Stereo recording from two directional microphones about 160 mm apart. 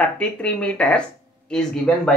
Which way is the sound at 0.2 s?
5° left (ahead or behind).